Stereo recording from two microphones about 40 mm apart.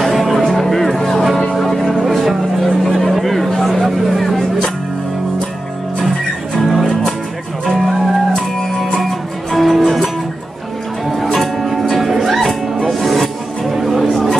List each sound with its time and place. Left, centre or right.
0.0 s music: centre
5.9 s music: centre
7.6 s music: centre
11.3 s music: centre
14.1 s a sound: centre